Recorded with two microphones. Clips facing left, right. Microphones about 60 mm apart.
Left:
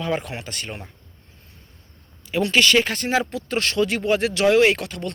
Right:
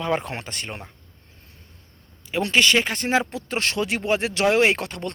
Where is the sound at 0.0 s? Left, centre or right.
Right.